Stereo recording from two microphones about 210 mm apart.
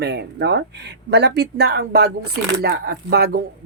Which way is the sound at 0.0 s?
50° right (ahead or behind).